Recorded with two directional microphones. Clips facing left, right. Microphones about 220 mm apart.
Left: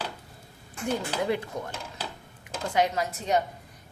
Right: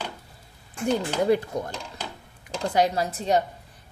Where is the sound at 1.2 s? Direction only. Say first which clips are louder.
Right 6 dB; 40° right (ahead or behind).